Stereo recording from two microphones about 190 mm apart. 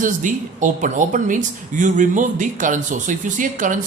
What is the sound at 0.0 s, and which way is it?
Speech, 45° right (ahead or behind).